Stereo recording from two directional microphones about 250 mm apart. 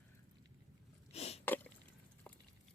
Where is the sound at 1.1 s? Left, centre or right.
Left.